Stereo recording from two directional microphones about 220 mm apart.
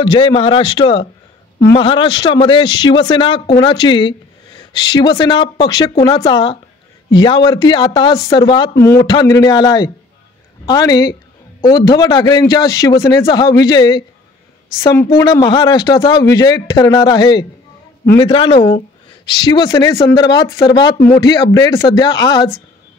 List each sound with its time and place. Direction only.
0.0 s a man's voice: 20° left (ahead or behind)